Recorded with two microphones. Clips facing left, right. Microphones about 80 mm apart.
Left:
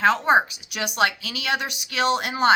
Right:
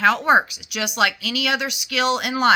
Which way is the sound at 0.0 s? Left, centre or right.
Left.